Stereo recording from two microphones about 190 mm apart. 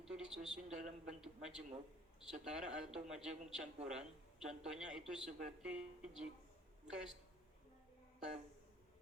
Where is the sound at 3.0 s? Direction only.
Centre (ahead or behind).